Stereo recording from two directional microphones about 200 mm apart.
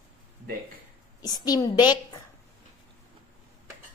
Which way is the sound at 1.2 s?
20° left (ahead or behind).